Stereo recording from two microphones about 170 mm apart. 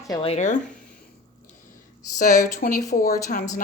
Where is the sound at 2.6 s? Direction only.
55° left (ahead or behind).